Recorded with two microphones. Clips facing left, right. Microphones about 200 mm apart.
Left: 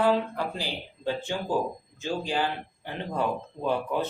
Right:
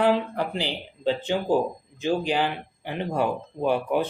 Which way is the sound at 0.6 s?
20° right (ahead or behind).